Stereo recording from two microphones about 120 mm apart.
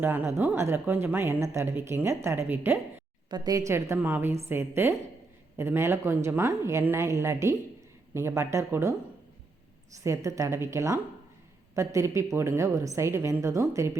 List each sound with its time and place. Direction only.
0.0 s speech: 15° right (ahead or behind)
3.2 s a woman's voice: 35° right (ahead or behind)
3.7 s speech: 20° right (ahead or behind)
10.0 s speech: 25° right (ahead or behind)